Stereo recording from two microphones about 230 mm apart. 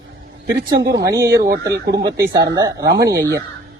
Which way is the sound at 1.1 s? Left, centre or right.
Centre.